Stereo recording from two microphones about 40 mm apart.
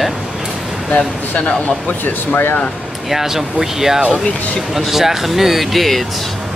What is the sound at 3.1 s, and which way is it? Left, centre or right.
Speech, centre.